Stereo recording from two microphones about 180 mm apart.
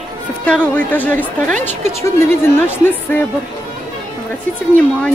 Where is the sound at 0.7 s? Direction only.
10° left (ahead or behind).